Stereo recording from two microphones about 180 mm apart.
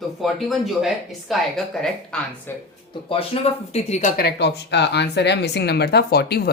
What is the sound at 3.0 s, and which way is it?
Speech, 30° left (ahead or behind).